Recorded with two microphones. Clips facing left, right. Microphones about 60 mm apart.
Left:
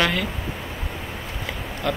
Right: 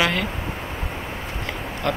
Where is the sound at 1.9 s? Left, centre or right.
Centre.